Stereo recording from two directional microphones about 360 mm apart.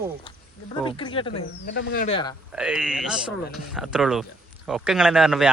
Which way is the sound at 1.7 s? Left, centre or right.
Left.